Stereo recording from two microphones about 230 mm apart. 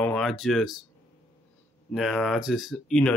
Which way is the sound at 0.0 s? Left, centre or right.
Centre.